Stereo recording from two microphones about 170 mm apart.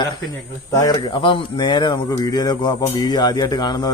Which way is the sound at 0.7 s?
20° left (ahead or behind).